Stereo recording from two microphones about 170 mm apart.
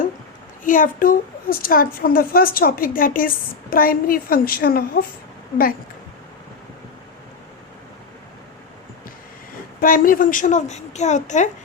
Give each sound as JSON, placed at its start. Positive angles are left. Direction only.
{"t": 0.6, "sound": "a child's voice", "side_deg": 50}
{"t": 9.8, "sound": "speech", "side_deg": 55}